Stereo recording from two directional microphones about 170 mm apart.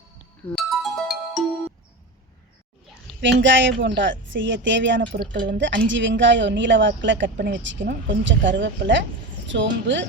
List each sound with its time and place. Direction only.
0.5 s music: centre (ahead or behind)
3.2 s speech: 90° right